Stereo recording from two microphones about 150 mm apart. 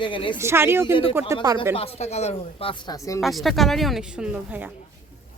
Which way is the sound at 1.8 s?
45° left (ahead or behind).